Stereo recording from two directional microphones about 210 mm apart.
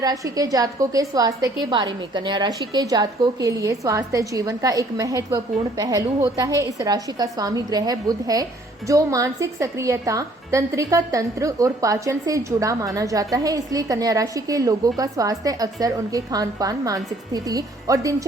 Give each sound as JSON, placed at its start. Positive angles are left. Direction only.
{"t": 0.0, "sound": "a woman's voice", "side_deg": -15}